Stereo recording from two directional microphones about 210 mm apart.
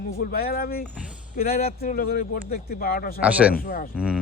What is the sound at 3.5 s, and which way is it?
Speech, 45° left (ahead or behind).